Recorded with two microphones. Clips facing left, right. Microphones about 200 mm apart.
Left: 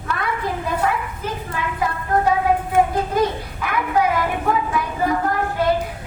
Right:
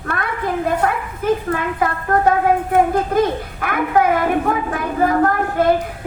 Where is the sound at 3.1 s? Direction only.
55° right (ahead or behind).